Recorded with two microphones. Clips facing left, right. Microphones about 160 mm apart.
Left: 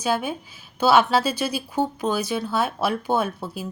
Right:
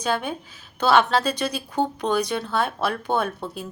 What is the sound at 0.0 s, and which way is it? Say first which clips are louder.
Speech: left 1 dB; 5° left (ahead or behind).